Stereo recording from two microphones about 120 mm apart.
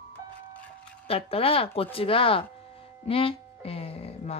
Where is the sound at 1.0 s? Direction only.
50° left (ahead or behind).